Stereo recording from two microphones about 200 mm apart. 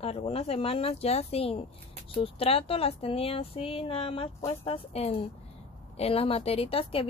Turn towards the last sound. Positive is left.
turn(degrees=30)  # may be behind; listen again after turning